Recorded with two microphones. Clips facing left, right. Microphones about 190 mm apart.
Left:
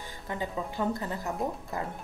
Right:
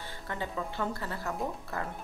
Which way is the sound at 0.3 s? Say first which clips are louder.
Left 2 dB; 15° left (ahead or behind).